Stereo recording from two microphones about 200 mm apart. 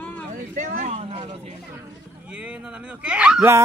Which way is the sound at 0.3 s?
40° right (ahead or behind).